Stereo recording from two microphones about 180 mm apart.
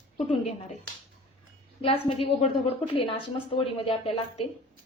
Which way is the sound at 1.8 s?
30° left (ahead or behind).